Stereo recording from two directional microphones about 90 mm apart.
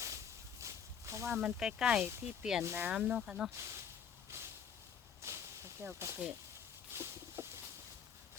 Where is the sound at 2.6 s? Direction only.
25° right (ahead or behind).